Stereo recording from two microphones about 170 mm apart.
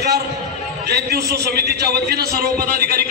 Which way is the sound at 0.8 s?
70° right (ahead or behind).